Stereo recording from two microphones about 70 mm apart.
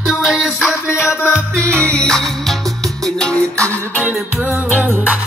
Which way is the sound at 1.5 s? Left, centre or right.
Centre.